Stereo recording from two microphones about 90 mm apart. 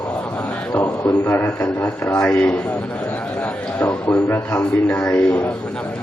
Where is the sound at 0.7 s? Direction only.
20° left (ahead or behind).